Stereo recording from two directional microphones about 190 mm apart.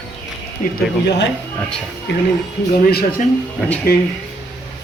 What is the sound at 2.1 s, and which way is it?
Speech, 65° left (ahead or behind).